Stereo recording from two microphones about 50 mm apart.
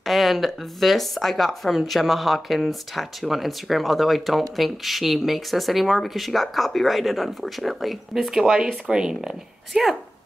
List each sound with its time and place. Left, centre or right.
0.0 s a woman's voice: centre